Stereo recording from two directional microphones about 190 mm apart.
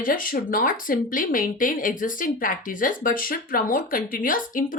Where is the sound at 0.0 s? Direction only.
50° left (ahead or behind).